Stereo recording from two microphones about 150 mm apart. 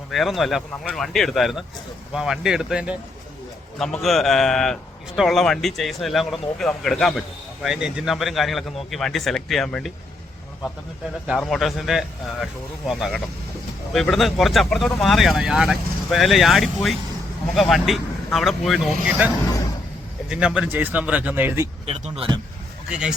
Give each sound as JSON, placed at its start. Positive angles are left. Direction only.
{"t": 0.1, "sound": "speech", "side_deg": 0}
{"t": 11.3, "sound": "speech", "side_deg": 0}
{"t": 20.3, "sound": "speech", "side_deg": -5}
{"t": 21.8, "sound": "speech", "side_deg": -40}
{"t": 22.9, "sound": "speech", "side_deg": -5}